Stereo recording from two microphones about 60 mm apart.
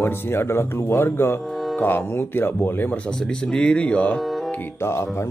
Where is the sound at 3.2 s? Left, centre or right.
Centre.